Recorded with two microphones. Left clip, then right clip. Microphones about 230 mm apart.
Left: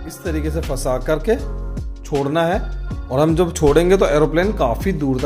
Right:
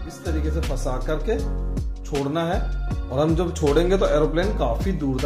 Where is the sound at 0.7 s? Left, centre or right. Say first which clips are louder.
Left 9 dB; left.